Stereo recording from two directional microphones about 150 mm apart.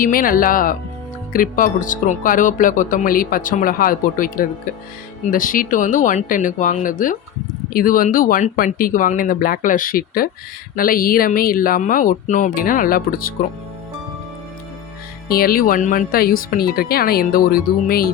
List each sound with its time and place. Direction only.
0.0 s speech: 70° left (ahead or behind)
15.3 s speech: 80° left